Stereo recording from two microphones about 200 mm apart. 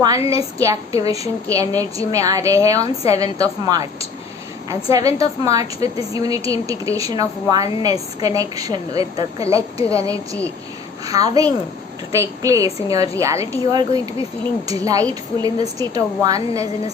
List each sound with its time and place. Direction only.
0.0 s a woman's voice: 15° right (ahead or behind)
11.0 s a woman's voice: 15° right (ahead or behind)